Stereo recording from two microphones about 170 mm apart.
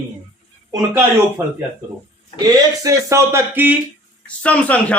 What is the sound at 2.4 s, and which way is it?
Speech, 20° right (ahead or behind).